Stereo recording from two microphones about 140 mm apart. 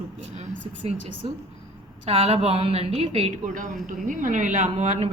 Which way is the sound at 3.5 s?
70° right (ahead or behind).